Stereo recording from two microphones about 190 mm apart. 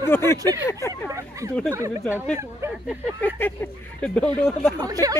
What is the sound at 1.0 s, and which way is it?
Speech, 15° right (ahead or behind).